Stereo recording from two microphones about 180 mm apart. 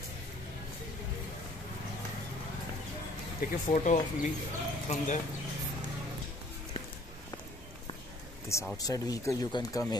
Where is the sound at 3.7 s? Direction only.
45° left (ahead or behind).